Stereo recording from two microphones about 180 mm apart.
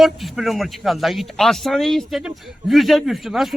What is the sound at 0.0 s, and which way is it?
Speech, centre (ahead or behind).